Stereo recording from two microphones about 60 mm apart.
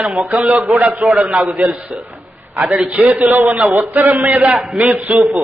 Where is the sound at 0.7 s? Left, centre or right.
Centre.